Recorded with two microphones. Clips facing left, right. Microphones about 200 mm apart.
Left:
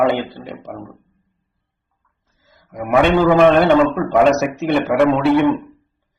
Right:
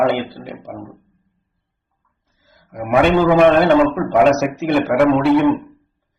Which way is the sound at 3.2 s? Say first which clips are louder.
Even; 15° right (ahead or behind).